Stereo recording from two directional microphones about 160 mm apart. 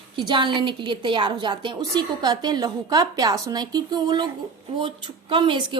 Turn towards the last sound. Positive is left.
turn(degrees=-30)  # may be behind; listen again after turning